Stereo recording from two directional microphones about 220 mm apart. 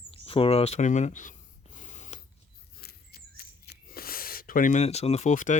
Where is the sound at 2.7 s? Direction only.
45° left (ahead or behind).